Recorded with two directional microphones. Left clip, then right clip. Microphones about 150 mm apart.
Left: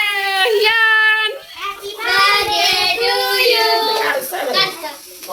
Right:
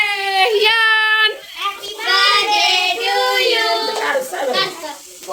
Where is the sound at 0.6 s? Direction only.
45° right (ahead or behind).